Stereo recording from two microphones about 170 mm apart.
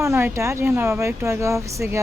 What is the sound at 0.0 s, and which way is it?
Speech, 15° right (ahead or behind).